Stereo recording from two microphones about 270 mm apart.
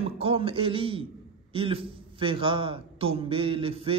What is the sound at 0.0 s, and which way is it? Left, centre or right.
A man's voice, right.